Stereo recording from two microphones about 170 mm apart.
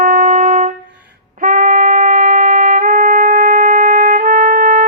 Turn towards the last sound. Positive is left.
turn(degrees=-50)  # may be behind; listen again after turning